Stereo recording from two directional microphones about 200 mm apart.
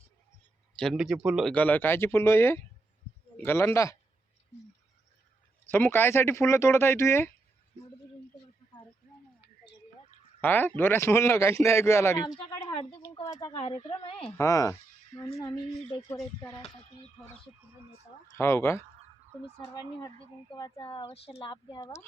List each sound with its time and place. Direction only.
0.8 s a man's voice: centre (ahead or behind)
5.7 s a man's voice: 10° left (ahead or behind)
10.4 s a man's voice: 10° left (ahead or behind)
12.5 s a sound: 20° left (ahead or behind)
14.3 s a man's voice: 15° left (ahead or behind)
16.6 s speech: 30° left (ahead or behind)
18.3 s a man's voice: 15° left (ahead or behind)